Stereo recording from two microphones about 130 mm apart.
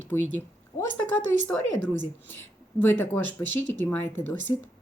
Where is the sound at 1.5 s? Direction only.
10° left (ahead or behind).